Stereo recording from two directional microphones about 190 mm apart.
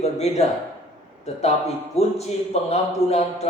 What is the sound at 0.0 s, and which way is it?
A man's voice, 35° left (ahead or behind).